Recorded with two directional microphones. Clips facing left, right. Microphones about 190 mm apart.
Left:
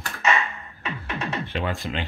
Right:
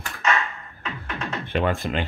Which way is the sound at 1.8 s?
55° right (ahead or behind).